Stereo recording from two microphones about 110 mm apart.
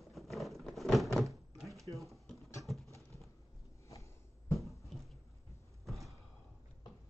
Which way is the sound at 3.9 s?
30° left (ahead or behind).